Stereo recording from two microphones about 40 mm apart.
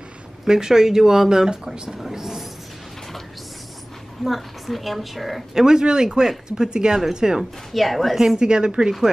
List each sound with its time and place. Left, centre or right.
0.5 s speech: centre
4.2 s a woman's voice: centre
5.5 s speech: centre
7.7 s a woman's voice: centre
8.4 s a woman's voice: centre